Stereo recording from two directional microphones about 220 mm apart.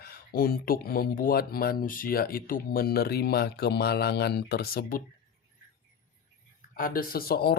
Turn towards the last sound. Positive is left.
turn(degrees=45)  # may be behind; listen again after turning